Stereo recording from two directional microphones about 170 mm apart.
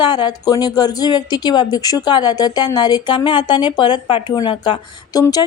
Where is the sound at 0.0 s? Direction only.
25° left (ahead or behind).